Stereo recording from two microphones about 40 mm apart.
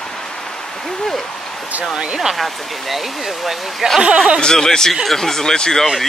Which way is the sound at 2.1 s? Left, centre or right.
Centre.